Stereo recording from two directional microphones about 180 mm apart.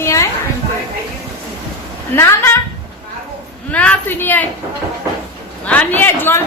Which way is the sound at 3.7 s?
10° left (ahead or behind).